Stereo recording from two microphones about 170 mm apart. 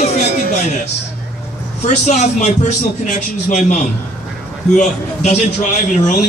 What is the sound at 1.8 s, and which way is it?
A man's voice, 40° left (ahead or behind).